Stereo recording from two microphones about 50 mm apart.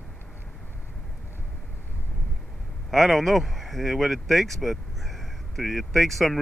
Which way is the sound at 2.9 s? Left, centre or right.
Centre.